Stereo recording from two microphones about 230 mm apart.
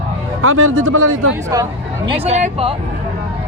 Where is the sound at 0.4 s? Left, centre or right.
Right.